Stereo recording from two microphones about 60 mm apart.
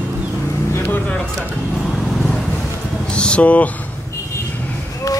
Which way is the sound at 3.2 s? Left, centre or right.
Centre.